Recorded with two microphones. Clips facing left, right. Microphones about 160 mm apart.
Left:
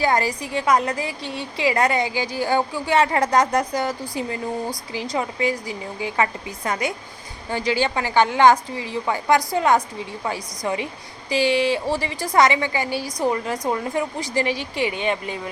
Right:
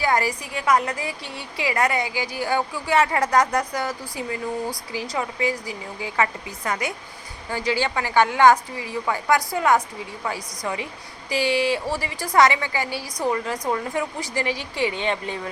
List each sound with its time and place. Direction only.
0.0 s a woman's voice: 25° left (ahead or behind)
5.1 s a woman's voice: 25° left (ahead or behind)